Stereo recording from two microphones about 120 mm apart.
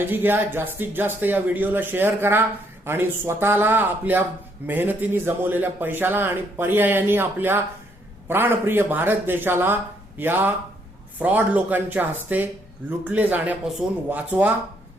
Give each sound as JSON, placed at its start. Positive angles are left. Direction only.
{"t": 0.1, "sound": "speech", "side_deg": -15}